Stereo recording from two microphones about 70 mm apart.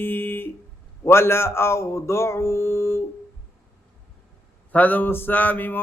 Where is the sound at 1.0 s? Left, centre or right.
Left.